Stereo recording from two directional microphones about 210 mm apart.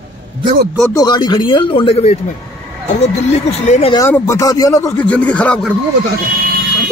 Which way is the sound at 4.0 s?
10° left (ahead or behind).